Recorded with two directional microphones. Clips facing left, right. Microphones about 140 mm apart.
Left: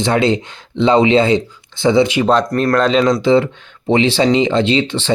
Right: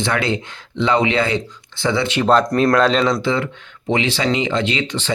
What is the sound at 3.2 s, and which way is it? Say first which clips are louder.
Speech: left 8 dB; 25° left (ahead or behind).